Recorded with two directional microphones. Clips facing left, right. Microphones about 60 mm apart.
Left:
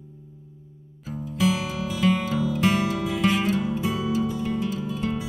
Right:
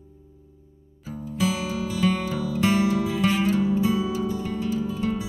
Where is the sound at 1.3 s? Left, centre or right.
Left.